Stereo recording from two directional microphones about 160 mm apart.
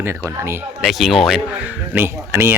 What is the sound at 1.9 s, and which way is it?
Speech, 15° right (ahead or behind).